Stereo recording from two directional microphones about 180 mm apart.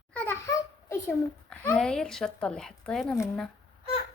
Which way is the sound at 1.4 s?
10° left (ahead or behind).